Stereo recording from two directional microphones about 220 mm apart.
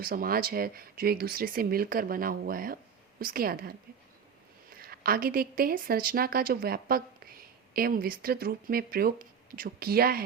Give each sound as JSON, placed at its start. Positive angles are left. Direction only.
{"t": 0.0, "sound": "a woman's voice", "side_deg": -40}